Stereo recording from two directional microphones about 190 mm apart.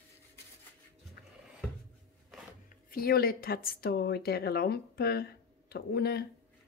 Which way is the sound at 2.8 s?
50° left (ahead or behind).